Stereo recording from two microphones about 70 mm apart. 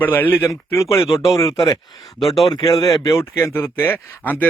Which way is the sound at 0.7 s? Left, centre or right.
Left.